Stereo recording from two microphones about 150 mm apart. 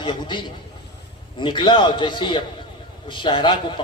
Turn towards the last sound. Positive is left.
turn(degrees=30)  # may be behind; listen again after turning